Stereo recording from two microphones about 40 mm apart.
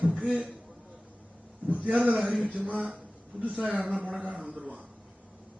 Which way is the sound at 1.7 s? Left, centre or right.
Right.